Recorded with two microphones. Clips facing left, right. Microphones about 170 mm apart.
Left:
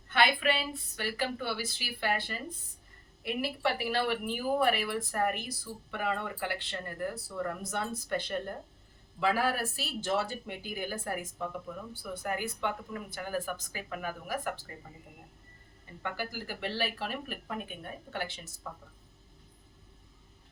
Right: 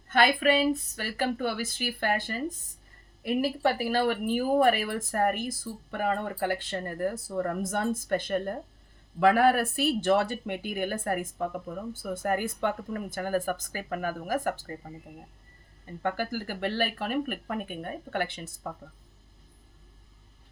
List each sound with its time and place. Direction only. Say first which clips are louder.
0.1 s speech: right 5 dB; 45° right (ahead or behind)
16.0 s speech: right 7 dB; 45° right (ahead or behind)